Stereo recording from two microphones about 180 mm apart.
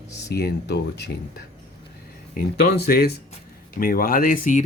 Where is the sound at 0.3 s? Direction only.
65° left (ahead or behind).